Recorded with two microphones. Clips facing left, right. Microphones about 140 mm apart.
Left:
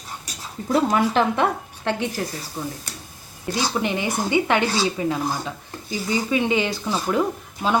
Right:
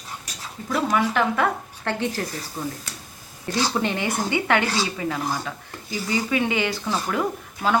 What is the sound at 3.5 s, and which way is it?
Speech, 10° left (ahead or behind).